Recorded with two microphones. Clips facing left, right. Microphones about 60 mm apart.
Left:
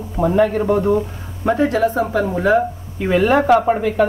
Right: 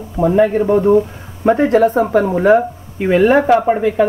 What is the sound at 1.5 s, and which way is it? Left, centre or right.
Speech, right.